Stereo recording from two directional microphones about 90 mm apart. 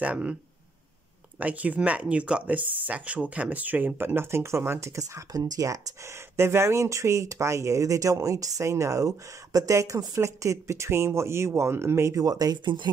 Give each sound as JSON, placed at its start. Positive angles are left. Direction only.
{"t": 0.0, "sound": "speech", "side_deg": -15}
{"t": 1.4, "sound": "speech", "side_deg": -15}